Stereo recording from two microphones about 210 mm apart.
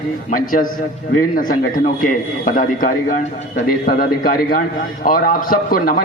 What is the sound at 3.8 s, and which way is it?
A man's voice, 45° left (ahead or behind).